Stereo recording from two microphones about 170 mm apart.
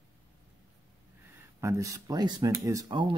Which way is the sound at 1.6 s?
20° right (ahead or behind).